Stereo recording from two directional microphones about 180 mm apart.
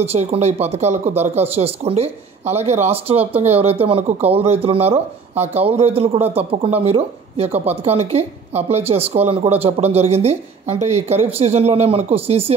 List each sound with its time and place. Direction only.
0.0 s speech: 35° right (ahead or behind)